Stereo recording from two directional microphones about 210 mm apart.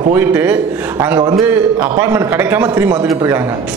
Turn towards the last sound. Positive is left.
turn(degrees=-10)  # may be behind; listen again after turning